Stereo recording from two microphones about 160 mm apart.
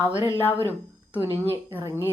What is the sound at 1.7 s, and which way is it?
Speech, 15° right (ahead or behind).